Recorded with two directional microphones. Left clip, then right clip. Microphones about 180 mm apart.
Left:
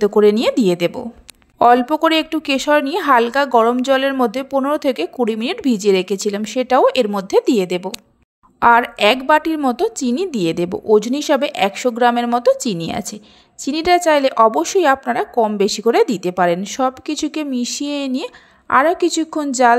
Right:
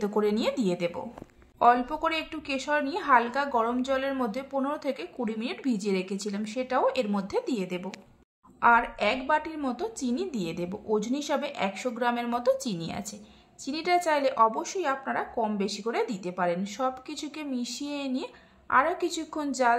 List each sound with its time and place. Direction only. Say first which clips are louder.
0.0 s a woman's voice: left 14 dB; 40° left (ahead or behind)